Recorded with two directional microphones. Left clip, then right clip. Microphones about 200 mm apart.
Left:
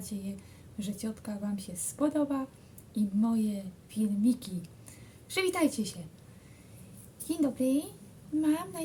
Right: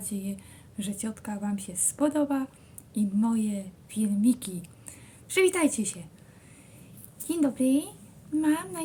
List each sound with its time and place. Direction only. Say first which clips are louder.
0.0 s a woman's voice: right 4 dB; 20° left (ahead or behind)
7.3 s a woman's voice: right 4 dB; 20° left (ahead or behind)